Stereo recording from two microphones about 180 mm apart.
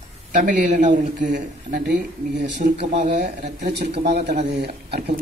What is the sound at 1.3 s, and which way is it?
Speech, 65° right (ahead or behind).